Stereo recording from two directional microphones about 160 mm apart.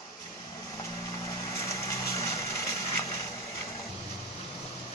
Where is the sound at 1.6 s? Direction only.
20° left (ahead or behind).